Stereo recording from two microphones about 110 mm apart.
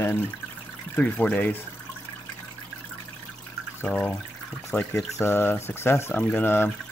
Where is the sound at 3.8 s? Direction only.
15° left (ahead or behind).